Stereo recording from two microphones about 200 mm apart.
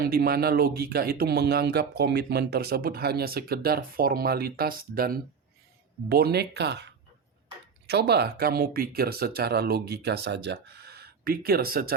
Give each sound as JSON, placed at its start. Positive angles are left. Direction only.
{"t": 0.0, "sound": "speech", "side_deg": -50}